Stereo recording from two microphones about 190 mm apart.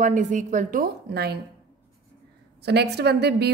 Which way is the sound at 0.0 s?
40° right (ahead or behind).